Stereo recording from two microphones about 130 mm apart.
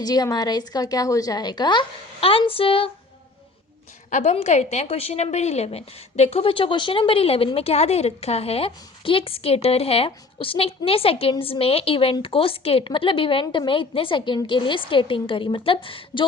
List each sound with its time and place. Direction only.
0.0 s a woman's voice: 30° left (ahead or behind)
4.1 s a woman's voice: 65° left (ahead or behind); by 16.2 s 45° left (ahead or behind)